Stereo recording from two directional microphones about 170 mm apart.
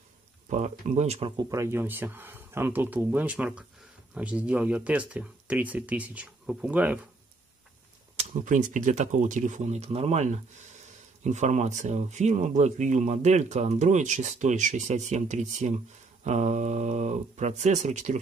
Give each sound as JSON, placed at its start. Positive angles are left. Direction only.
{"t": 0.5, "sound": "speech", "side_deg": -45}
{"t": 8.2, "sound": "speech", "side_deg": -45}